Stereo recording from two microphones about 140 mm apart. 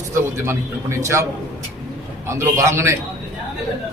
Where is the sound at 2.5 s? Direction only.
20° right (ahead or behind).